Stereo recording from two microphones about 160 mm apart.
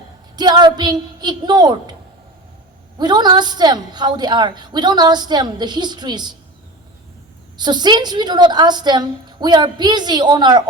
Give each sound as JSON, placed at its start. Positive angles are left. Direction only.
{"t": 0.3, "sound": "a woman's voice", "side_deg": -25}
{"t": 3.0, "sound": "a woman's voice", "side_deg": -25}
{"t": 7.5, "sound": "a woman's voice", "side_deg": -25}